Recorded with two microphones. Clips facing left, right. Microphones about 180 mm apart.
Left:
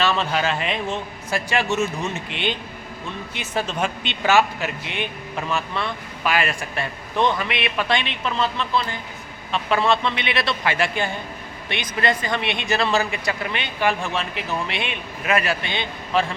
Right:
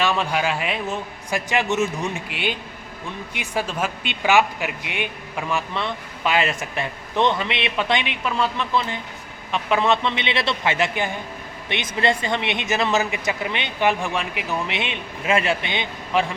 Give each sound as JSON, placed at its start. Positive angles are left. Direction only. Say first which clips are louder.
{"t": 0.0, "sound": "a man's voice", "louder": "even", "side_deg": -10}
{"t": 1.5, "sound": "a man's voice", "louder": "right 1 dB", "side_deg": -20}